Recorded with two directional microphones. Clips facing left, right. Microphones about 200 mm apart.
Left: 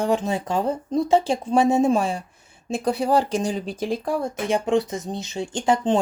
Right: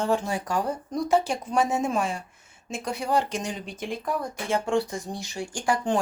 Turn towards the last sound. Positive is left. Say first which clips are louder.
# left 5 dB
turn(degrees=20)  # may be behind; listen again after turning